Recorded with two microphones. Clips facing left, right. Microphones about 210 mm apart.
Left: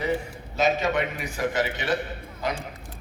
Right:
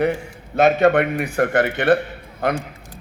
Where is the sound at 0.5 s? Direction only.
60° right (ahead or behind).